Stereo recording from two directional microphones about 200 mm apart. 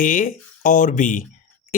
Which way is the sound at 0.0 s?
40° left (ahead or behind).